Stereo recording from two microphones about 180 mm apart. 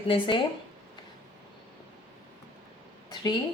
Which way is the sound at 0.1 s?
30° left (ahead or behind).